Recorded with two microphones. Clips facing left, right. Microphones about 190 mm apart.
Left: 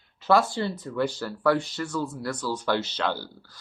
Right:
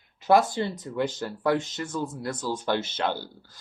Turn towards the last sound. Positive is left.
turn(degrees=-20)  # may be behind; listen again after turning